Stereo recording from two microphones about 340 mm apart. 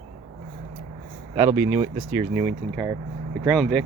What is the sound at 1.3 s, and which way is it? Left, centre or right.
Speech, centre.